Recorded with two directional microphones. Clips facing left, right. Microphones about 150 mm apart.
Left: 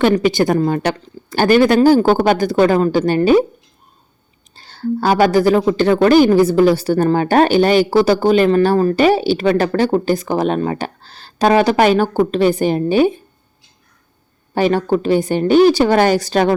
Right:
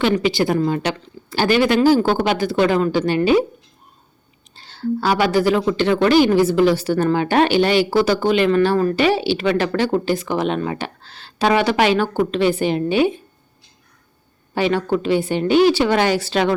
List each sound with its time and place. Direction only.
0.0 s a woman's voice: 50° left (ahead or behind)
4.5 s a woman's voice: 45° left (ahead or behind)
14.5 s a woman's voice: 45° left (ahead or behind)